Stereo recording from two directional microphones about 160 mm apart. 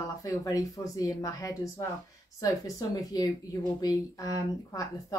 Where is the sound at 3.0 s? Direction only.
20° left (ahead or behind).